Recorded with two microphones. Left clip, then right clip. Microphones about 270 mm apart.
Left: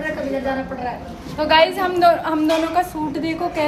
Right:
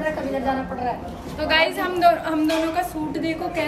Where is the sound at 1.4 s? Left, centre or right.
Centre.